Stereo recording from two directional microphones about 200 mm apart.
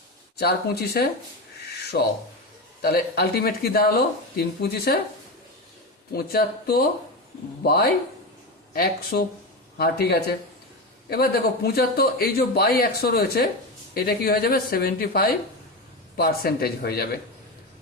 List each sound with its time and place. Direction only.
0.3 s speech: 50° left (ahead or behind)
6.1 s speech: 50° left (ahead or behind)